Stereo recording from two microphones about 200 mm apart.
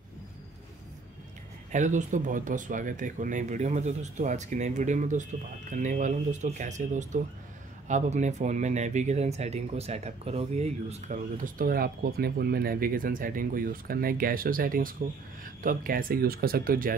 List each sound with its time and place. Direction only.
1.7 s speech: 40° right (ahead or behind)